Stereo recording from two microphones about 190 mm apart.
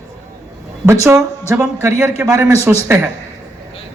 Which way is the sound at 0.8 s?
15° right (ahead or behind).